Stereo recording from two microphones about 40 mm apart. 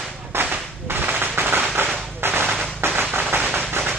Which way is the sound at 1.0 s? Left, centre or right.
Right.